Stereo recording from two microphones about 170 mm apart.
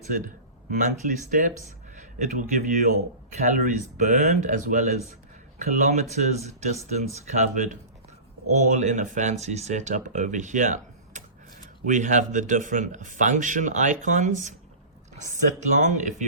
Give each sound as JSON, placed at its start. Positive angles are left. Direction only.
{"t": 0.7, "sound": "speech", "side_deg": -50}
{"t": 15.7, "sound": "speech", "side_deg": -45}